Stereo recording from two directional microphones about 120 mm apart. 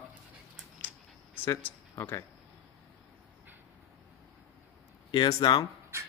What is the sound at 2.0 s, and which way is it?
Speech, 25° left (ahead or behind).